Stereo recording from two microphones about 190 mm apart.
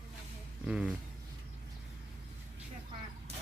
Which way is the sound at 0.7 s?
5° right (ahead or behind).